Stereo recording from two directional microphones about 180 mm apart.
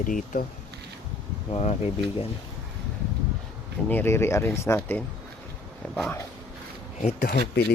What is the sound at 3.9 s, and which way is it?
Speech, 10° left (ahead or behind).